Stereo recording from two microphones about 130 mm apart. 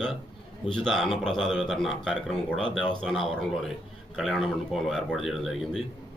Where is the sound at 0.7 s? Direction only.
5° left (ahead or behind).